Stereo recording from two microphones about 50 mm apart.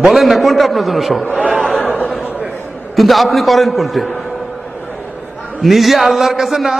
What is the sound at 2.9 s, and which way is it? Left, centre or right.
A man's voice, centre.